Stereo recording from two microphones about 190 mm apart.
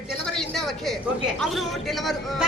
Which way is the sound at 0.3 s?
Centre (ahead or behind).